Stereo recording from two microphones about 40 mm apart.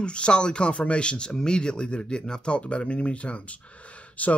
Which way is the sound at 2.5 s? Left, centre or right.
Left.